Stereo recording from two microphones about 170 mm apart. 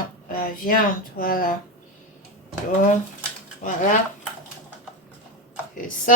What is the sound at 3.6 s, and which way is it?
Speech, 50° left (ahead or behind).